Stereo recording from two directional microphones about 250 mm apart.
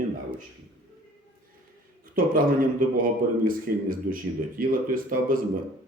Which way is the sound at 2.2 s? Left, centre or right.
Right.